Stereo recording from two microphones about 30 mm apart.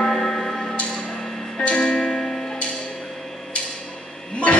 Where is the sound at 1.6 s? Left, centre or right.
Left.